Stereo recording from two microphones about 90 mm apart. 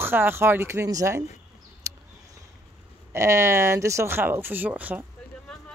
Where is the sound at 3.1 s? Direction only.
30° right (ahead or behind).